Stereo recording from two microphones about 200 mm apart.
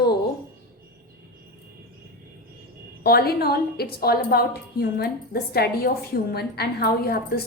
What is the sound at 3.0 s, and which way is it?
A woman's voice, 50° left (ahead or behind).